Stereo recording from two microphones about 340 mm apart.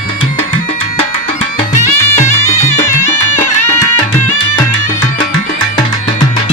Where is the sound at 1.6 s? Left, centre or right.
Left.